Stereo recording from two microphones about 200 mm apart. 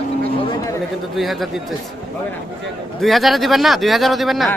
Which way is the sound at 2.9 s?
Centre (ahead or behind).